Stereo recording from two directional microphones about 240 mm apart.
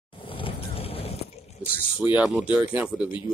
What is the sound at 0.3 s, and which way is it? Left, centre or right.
Vehicle, left.